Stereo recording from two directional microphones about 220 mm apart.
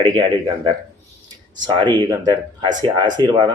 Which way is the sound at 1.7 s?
20° right (ahead or behind).